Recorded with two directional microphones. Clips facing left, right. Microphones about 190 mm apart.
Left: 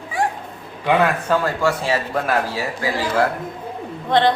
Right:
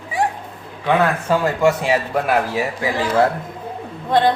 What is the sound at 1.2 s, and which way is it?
A man's voice, 20° right (ahead or behind).